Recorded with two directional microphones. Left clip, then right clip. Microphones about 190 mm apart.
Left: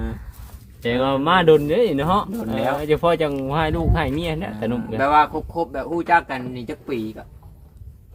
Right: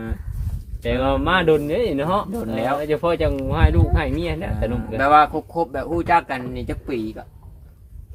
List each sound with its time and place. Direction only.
0.8 s speech: 35° left (ahead or behind)
4.9 s speech: 25° right (ahead or behind)